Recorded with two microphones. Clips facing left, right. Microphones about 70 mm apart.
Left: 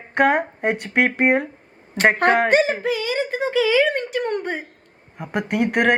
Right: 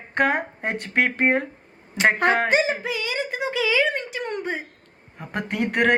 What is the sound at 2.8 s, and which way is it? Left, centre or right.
Speech, left.